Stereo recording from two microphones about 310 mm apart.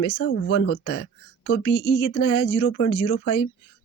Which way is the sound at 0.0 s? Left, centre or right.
Left.